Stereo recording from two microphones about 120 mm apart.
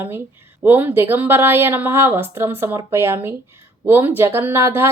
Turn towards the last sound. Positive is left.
turn(degrees=-20)  # may be behind; listen again after turning